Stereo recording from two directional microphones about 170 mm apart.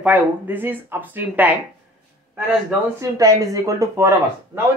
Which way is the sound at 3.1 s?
20° right (ahead or behind).